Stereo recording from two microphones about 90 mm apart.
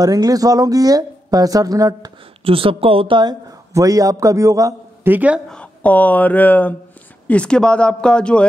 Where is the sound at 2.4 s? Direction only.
90° right; by 3.4 s 60° right (ahead or behind).